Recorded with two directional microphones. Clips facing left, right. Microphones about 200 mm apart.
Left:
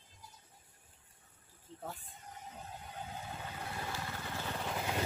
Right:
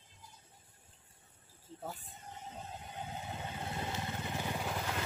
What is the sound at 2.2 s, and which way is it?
Vehicle, 25° right (ahead or behind).